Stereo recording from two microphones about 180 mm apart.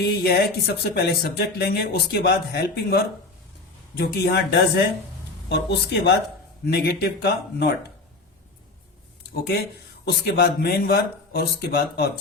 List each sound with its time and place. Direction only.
0.0 s speech: 60° left (ahead or behind)
10.1 s speech: 60° left (ahead or behind)